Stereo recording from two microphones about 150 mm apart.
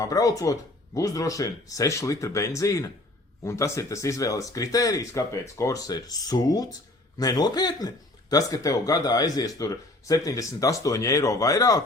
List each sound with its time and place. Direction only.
0.0 s speech: 25° left (ahead or behind)